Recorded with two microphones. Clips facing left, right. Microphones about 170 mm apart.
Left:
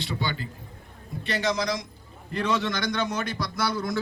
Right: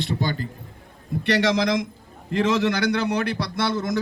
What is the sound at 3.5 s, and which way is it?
Speech, 25° right (ahead or behind).